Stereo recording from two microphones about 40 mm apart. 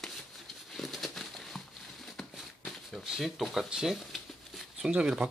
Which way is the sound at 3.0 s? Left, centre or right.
Centre.